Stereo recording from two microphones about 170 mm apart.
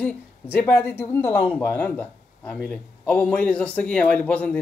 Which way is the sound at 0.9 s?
15° left (ahead or behind).